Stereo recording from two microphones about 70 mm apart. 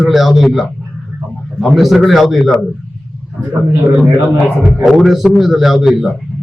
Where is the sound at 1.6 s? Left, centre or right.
Centre.